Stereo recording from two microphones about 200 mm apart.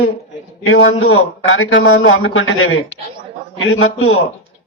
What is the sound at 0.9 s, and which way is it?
A man's voice, 85° left.